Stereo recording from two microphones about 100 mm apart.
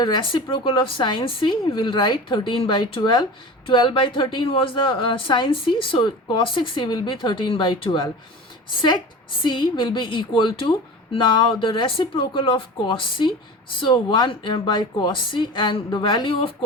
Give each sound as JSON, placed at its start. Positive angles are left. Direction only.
{"t": 0.0, "sound": "a woman's voice", "side_deg": 50}
{"t": 9.4, "sound": "a woman's voice", "side_deg": 50}